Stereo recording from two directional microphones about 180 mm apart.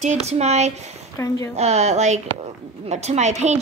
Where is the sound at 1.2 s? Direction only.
15° left (ahead or behind).